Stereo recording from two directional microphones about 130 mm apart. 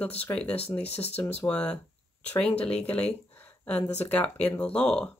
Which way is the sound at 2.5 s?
50° left (ahead or behind).